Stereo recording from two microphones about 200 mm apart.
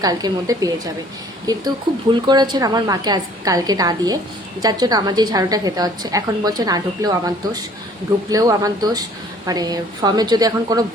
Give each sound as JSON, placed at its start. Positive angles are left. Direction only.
{"t": 0.0, "sound": "a woman's voice", "side_deg": -20}